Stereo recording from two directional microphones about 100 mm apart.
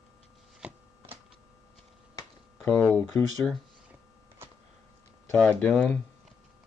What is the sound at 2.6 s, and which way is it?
Speech, 10° left (ahead or behind).